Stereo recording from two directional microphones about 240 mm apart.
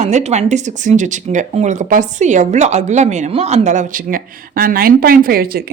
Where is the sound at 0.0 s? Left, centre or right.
Right.